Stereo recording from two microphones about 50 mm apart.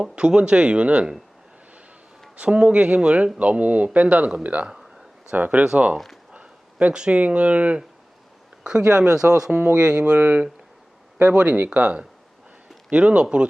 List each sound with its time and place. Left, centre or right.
0.0 s speech: centre
2.3 s speech: right
4.6 s speech: centre
5.3 s speech: right
6.3 s a sound: right
6.9 s speech: right
10.2 s speech: right